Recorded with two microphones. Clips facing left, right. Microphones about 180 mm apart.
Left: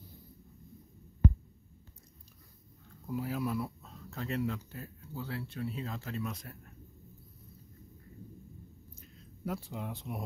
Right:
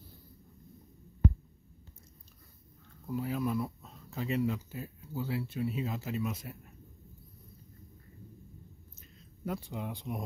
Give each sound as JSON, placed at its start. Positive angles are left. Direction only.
{"t": 3.1, "sound": "speech", "side_deg": 5}
{"t": 9.0, "sound": "speech", "side_deg": 5}